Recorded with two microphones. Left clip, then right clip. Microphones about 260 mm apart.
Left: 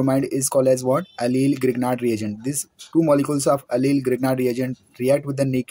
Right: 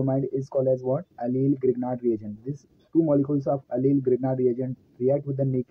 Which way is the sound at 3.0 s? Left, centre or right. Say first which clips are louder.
Left 5 dB; left.